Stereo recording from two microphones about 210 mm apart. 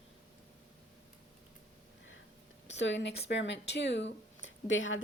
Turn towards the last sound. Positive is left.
turn(degrees=65)  # may be behind; listen again after turning